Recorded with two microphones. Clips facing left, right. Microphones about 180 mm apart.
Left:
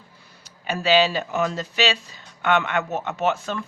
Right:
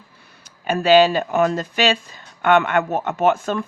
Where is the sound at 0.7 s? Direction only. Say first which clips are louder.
Right 6 dB; 50° right (ahead or behind).